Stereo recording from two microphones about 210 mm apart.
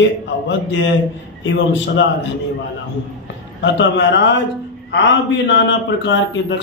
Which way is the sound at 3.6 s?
60° left (ahead or behind).